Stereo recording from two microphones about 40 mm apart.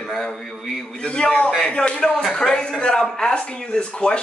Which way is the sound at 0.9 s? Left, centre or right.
Left.